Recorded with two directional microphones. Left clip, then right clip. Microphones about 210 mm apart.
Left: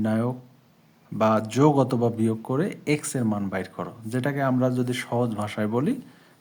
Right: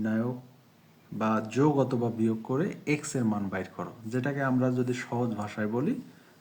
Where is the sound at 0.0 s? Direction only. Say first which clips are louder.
Left 5 dB; 45° left (ahead or behind).